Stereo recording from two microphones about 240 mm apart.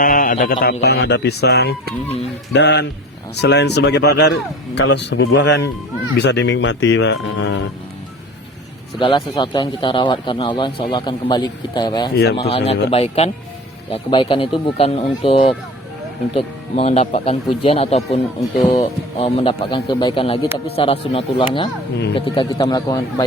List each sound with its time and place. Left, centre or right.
0.0 s a man's voice: left
9.0 s speech: left
12.1 s speech: left
12.9 s speech: left